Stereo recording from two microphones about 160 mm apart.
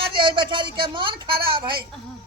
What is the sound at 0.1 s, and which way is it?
A woman's voice, 30° right (ahead or behind).